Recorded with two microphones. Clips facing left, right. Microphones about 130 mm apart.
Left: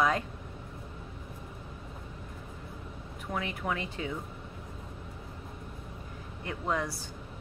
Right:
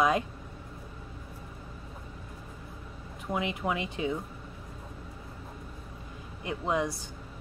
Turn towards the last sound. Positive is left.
turn(degrees=-15)  # may be behind; listen again after turning